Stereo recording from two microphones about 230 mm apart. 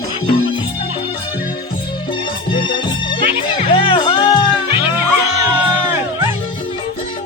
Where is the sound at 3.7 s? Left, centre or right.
Left.